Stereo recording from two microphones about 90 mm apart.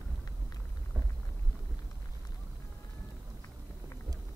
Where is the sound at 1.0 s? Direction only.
40° right (ahead or behind).